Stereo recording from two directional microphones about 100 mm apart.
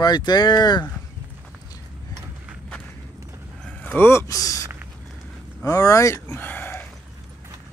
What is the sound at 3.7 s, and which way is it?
Speech, 15° left (ahead or behind).